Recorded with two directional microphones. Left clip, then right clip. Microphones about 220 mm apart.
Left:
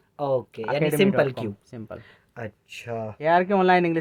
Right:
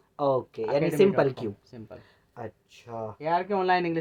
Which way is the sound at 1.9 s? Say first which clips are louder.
Left 3 dB; 20° left (ahead or behind).